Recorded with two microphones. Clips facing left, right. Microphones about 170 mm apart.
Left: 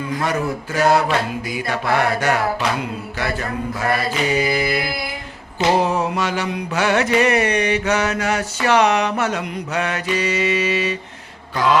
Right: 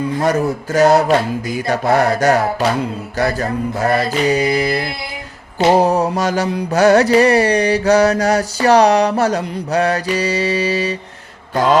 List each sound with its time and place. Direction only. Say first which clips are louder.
0.1 s mantra: right 3 dB; 40° right (ahead or behind)
11.5 s mantra: right 4 dB; 45° right (ahead or behind)